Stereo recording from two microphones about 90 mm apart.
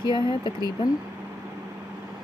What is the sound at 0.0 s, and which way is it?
Speech, 60° left (ahead or behind).